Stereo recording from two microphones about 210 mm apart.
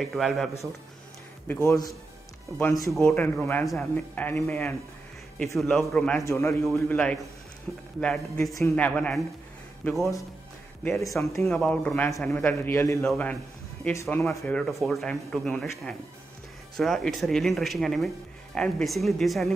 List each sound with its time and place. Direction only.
0.0 s speech: centre (ahead or behind)
1.5 s speech: 15° left (ahead or behind)
2.9 s speech: centre (ahead or behind)
6.2 s speech: 15° left (ahead or behind)